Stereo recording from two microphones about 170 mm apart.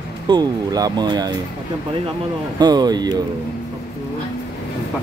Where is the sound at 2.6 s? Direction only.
25° right (ahead or behind).